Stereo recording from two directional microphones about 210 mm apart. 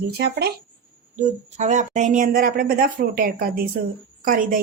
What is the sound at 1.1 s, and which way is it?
A woman's voice, 35° right (ahead or behind).